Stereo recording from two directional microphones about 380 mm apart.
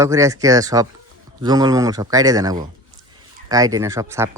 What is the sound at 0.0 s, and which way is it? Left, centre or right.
Speech, centre.